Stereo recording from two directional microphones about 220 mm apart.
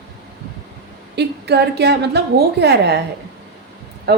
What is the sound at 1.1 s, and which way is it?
A woman's voice, 50° right (ahead or behind).